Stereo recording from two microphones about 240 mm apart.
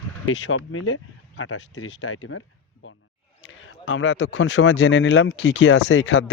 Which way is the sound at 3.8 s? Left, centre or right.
Left.